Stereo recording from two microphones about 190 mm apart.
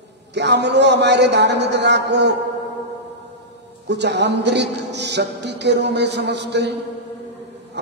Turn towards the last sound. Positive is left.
turn(degrees=-65)  # may be behind; listen again after turning